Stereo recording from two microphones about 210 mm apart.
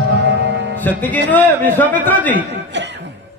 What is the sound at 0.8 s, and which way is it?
Music, 10° left (ahead or behind).